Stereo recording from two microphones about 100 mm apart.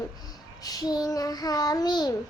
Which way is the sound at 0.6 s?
40° left (ahead or behind).